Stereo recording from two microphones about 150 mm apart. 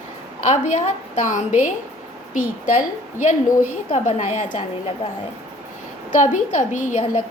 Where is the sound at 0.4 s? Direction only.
50° left (ahead or behind).